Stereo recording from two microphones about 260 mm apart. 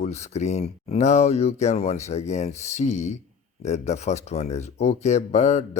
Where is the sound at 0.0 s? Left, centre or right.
Left.